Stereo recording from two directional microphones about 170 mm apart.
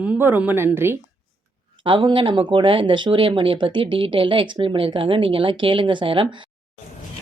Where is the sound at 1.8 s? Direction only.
30° right (ahead or behind).